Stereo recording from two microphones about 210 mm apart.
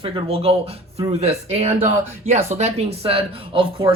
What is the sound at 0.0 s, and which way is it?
Speech, 25° right (ahead or behind).